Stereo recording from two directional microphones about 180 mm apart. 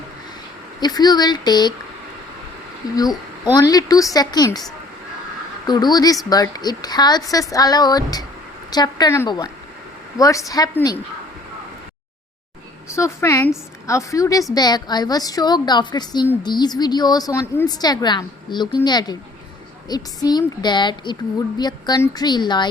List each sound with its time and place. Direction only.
0.8 s a woman's voice: 20° left (ahead or behind)
3.4 s a woman's voice: 20° left (ahead or behind)
5.6 s a woman's voice: 25° left (ahead or behind)
13.0 s a woman's voice: 15° left (ahead or behind)